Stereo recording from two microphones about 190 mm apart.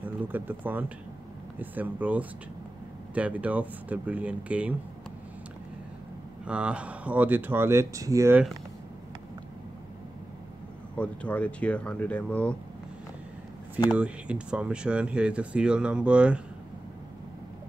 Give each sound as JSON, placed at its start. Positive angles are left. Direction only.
{"t": 0.0, "sound": "speech", "side_deg": -10}
{"t": 6.4, "sound": "speech", "side_deg": -5}
{"t": 11.0, "sound": "speech", "side_deg": 5}
{"t": 13.9, "sound": "speech", "side_deg": -5}